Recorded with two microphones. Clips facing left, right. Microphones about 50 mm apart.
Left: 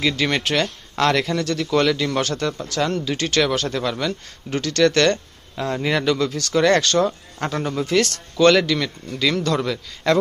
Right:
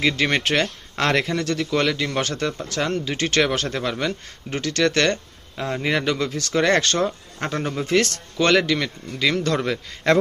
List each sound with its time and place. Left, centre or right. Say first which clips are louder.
0.0 s speech: even; right
2.2 s speech: left 1 dB; right